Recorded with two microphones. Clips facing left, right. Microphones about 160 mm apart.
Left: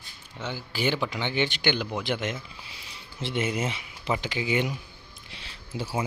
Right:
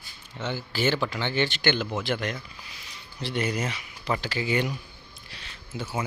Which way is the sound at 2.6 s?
30° left (ahead or behind).